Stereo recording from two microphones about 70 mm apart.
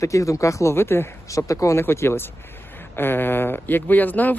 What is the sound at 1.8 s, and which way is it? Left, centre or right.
Speech, left.